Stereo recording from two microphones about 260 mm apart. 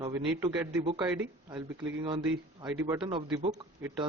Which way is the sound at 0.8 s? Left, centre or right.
Right.